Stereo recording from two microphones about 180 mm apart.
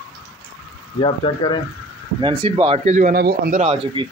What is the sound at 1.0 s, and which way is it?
Speech, 30° left (ahead or behind).